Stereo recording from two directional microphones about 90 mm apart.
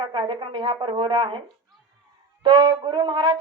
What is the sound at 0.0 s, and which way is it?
A woman's voice, 65° right (ahead or behind).